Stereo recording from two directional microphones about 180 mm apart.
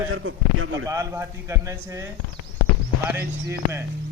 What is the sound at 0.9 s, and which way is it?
Speech, 15° right (ahead or behind).